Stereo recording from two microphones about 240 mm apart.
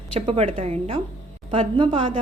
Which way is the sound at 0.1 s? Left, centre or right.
Right.